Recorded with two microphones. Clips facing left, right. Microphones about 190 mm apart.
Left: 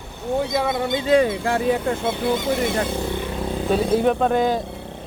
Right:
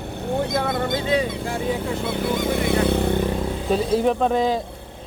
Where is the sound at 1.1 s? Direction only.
65° left (ahead or behind).